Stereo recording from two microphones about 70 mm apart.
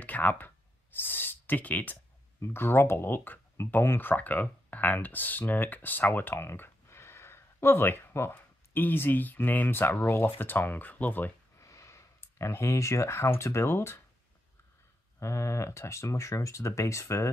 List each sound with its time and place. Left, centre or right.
0.0 s a sound: left
1.0 s speech: left
2.4 s speech: left
11.5 s speech: left
15.1 s speech: left